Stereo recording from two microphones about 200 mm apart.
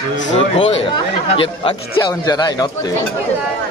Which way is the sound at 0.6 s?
25° left (ahead or behind).